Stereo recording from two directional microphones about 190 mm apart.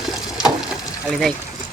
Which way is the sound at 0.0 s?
5° right (ahead or behind).